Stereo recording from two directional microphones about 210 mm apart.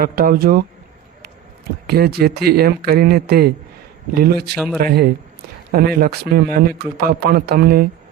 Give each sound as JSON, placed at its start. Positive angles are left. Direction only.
{"t": 0.0, "sound": "a man's voice", "side_deg": -45}
{"t": 1.9, "sound": "a man's voice", "side_deg": -50}